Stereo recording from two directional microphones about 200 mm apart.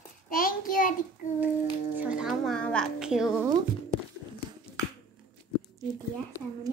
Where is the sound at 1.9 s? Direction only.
5° right (ahead or behind).